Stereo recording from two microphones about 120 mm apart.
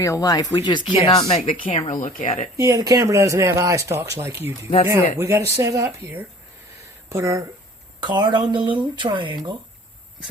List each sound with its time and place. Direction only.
0.0 s speech: 30° left (ahead or behind)
0.9 s speech: 55° left (ahead or behind)
1.9 s speech: 90° left
2.6 s speech: 30° right (ahead or behind)
7.1 s speech: 25° right (ahead or behind)
8.0 s speech: 40° right (ahead or behind)